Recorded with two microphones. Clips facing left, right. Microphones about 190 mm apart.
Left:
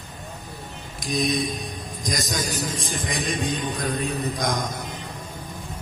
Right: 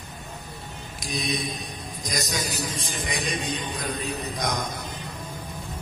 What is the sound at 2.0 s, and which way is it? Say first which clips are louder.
Jingle bell: left 2 dB; 45° left (ahead or behind).